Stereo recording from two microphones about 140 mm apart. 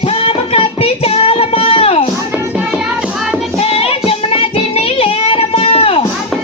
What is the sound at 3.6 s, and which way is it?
Child singing, 45° left (ahead or behind).